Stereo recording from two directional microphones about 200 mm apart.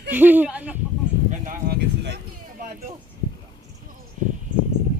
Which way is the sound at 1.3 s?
40° right (ahead or behind).